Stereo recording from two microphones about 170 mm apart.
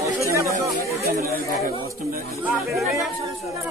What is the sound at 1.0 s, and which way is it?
Speech, 60° right (ahead or behind).